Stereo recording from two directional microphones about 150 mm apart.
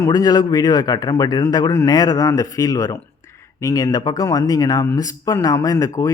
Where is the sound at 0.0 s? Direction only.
25° left (ahead or behind).